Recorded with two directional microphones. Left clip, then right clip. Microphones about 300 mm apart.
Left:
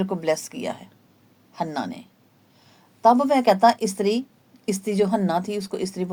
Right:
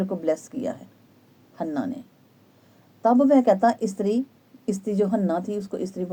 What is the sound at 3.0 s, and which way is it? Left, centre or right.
Speech, left.